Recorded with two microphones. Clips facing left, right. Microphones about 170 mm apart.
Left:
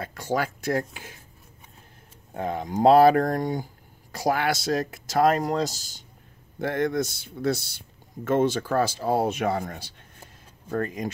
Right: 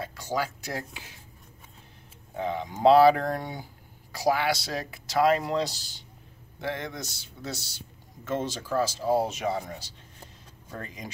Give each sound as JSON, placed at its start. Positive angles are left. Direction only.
{"t": 0.0, "sound": "speech", "side_deg": 55}
{"t": 2.3, "sound": "speech", "side_deg": 50}